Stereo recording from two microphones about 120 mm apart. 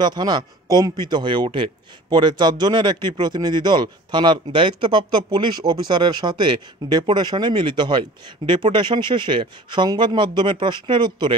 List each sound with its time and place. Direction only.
0.0 s speech: 35° right (ahead or behind)